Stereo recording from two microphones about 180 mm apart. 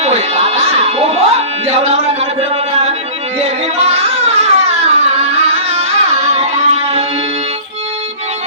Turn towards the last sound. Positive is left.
turn(degrees=-35)  # may be behind; listen again after turning